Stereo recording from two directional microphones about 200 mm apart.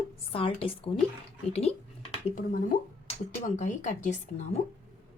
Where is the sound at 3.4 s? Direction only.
35° left (ahead or behind).